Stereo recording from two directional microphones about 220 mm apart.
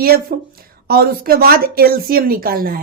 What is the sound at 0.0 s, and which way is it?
A woman's voice, 45° right (ahead or behind).